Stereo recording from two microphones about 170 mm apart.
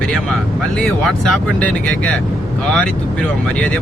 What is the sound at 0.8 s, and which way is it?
Speech, 5° left (ahead or behind).